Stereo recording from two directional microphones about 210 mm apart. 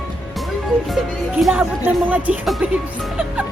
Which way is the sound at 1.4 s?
5° right (ahead or behind).